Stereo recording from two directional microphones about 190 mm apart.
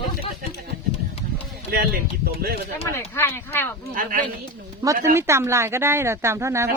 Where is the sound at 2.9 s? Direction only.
15° left (ahead or behind).